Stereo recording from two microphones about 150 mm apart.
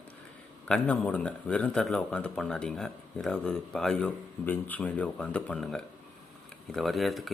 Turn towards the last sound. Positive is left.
turn(degrees=0)  # may be behind; listen again after turning